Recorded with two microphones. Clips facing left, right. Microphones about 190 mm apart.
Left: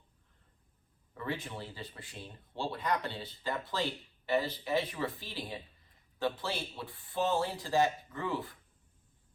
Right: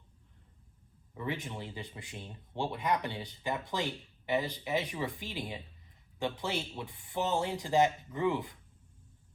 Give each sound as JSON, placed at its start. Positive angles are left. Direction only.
{"t": 1.1, "sound": "speech", "side_deg": -20}